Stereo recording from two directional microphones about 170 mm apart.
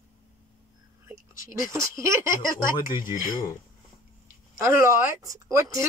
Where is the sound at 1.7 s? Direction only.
15° right (ahead or behind).